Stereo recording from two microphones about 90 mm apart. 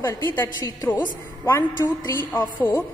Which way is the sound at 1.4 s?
25° left (ahead or behind).